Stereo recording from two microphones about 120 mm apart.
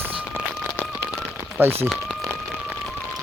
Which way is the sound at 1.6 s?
20° right (ahead or behind).